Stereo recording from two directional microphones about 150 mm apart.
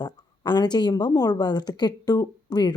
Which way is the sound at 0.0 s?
30° left (ahead or behind).